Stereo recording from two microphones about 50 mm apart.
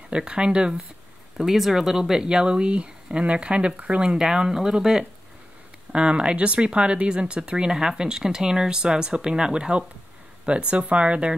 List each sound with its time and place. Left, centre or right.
0.1 s speech: centre
1.4 s speech: centre; by 4.0 s right
4.0 s speech: centre
7.7 s speech: centre